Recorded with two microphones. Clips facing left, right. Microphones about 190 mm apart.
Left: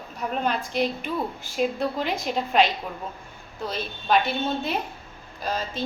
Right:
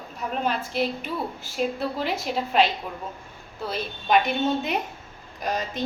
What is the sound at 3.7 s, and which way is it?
A woman's voice, 15° right (ahead or behind).